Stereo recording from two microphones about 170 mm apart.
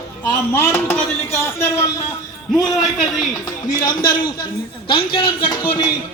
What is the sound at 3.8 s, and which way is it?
A man's voice, 25° left (ahead or behind).